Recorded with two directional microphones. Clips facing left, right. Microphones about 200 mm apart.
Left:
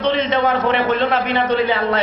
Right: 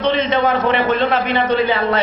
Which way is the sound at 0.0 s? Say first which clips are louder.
Right 1 dB; 20° right (ahead or behind).